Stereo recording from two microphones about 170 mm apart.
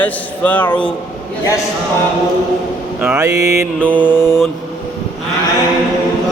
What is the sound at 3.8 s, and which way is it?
Speech, 10° left (ahead or behind).